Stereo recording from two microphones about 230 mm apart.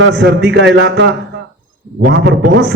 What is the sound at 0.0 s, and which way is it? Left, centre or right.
A man's voice, right.